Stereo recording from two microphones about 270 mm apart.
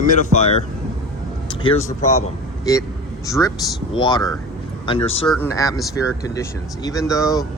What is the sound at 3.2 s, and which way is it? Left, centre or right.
Speech, centre.